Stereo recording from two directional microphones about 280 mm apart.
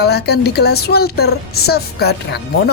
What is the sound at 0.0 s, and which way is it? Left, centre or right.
Speech, left.